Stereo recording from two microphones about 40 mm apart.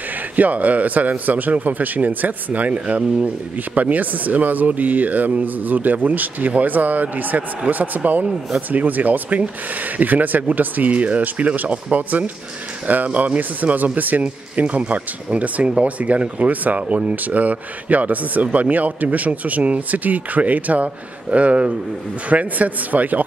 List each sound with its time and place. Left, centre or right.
0.4 s speech: right
2.7 s speech: right
3.7 s speech: right